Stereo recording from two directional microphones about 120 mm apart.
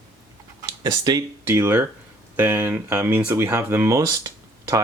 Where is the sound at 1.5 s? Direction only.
20° right (ahead or behind).